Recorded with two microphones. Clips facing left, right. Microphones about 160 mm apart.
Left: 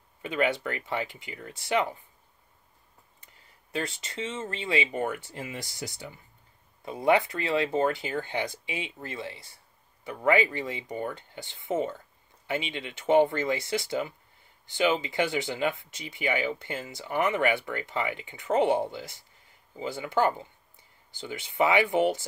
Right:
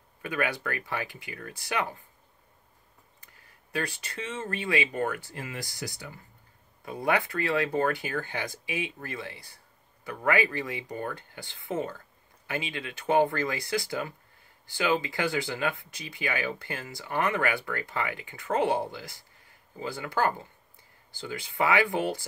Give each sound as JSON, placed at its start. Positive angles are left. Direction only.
{"t": 0.2, "sound": "speech", "side_deg": 25}
{"t": 3.7, "sound": "speech", "side_deg": 25}